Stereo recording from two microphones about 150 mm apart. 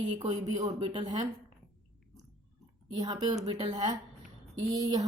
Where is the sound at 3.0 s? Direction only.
25° right (ahead or behind).